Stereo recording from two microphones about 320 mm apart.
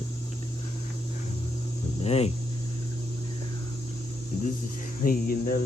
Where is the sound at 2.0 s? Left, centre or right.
Centre.